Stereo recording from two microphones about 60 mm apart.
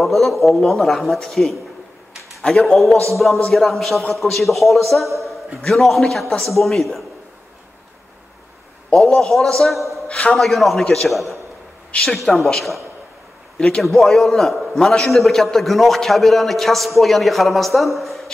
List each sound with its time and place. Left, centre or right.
0.0 s a man's voice: centre
8.9 s a man's voice: centre
10.0 s a man's voice: left
10.3 s a man's voice: centre